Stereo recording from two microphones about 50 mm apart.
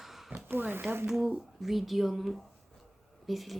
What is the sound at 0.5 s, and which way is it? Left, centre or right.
Speech, right.